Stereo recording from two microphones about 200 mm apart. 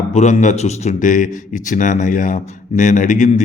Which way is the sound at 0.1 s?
35° left (ahead or behind).